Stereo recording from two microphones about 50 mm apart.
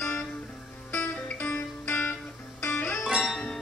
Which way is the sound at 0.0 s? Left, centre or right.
Left.